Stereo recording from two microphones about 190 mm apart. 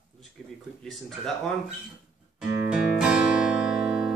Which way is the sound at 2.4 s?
5° right (ahead or behind).